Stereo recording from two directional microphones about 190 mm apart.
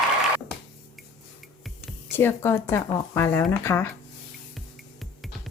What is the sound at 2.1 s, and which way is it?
Speech, 10° left (ahead or behind).